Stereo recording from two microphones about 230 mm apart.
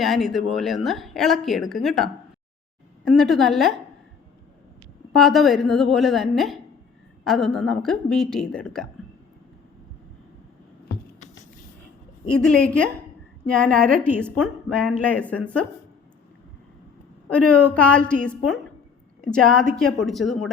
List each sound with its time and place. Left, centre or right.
0.0 s a woman's voice: centre
5.1 s a woman's voice: centre
12.3 s a woman's voice: centre
17.2 s a woman's voice: centre